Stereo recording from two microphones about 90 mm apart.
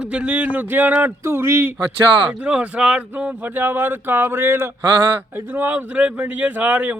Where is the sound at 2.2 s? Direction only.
15° right (ahead or behind).